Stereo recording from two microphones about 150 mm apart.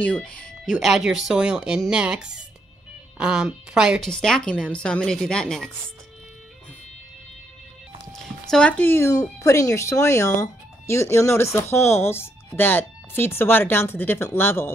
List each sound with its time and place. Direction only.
0.0 s speech: 10° left (ahead or behind)
8.5 s speech: 5° left (ahead or behind)